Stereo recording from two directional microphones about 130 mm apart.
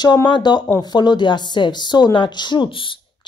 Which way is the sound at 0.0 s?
30° left (ahead or behind).